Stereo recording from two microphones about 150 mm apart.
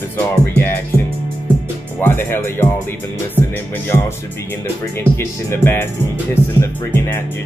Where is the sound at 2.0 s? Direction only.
15° left (ahead or behind).